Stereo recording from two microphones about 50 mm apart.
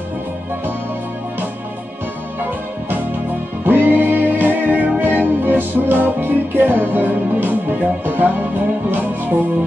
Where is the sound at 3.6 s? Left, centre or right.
Right.